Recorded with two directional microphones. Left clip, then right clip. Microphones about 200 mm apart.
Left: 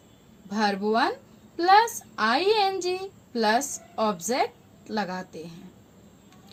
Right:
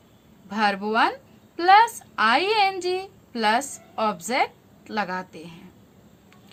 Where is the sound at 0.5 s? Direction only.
25° left (ahead or behind).